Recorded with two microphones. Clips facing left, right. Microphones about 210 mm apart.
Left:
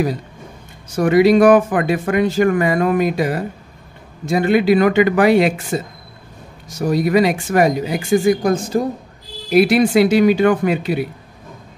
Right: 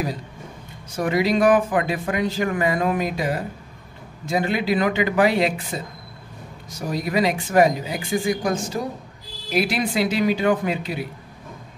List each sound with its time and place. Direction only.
1.0 s speech: 65° left (ahead or behind)
1.4 s speech: 75° left (ahead or behind)
8.3 s speech: 55° left (ahead or behind)
9.5 s speech: 65° left (ahead or behind)